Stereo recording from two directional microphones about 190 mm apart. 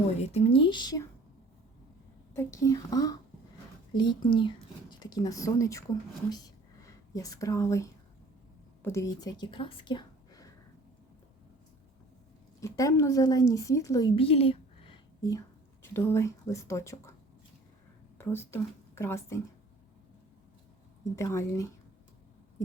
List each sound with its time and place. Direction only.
0.2 s speech: 35° left (ahead or behind)
2.3 s speech: 15° left (ahead or behind)
6.8 s a woman's voice: 20° left (ahead or behind)
12.5 s speech: 15° left (ahead or behind)
14.2 s a sound: 30° left (ahead or behind)
15.8 s speech: 15° left (ahead or behind)
18.2 s speech: 10° left (ahead or behind)
21.2 s speech: 15° left (ahead or behind)